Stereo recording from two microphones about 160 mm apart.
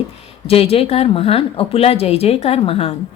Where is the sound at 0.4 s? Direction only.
40° left (ahead or behind).